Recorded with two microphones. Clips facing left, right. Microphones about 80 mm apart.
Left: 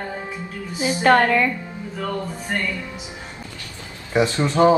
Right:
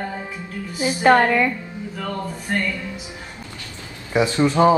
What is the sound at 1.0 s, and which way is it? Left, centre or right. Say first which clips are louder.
Speech: right 1 dB; centre.